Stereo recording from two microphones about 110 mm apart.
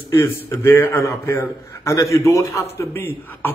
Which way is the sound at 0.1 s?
25° left (ahead or behind).